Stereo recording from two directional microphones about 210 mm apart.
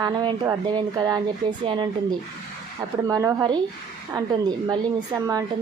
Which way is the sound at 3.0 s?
15° right (ahead or behind).